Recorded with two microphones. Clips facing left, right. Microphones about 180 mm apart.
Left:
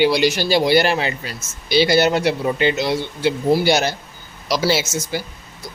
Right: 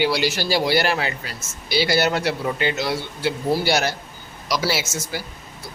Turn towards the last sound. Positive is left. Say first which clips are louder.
# left 5 dB
turn(degrees=20)  # may be behind; listen again after turning